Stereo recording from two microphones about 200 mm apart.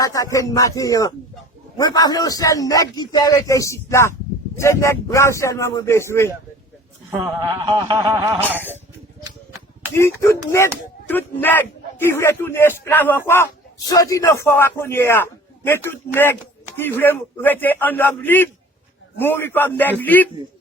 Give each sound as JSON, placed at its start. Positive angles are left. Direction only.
{"t": 0.0, "sound": "a man's voice", "side_deg": 15}
{"t": 7.6, "sound": "a sound", "side_deg": -20}
{"t": 9.9, "sound": "a man's voice", "side_deg": 15}